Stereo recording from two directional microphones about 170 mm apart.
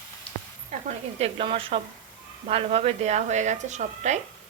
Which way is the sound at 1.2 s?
35° right (ahead or behind).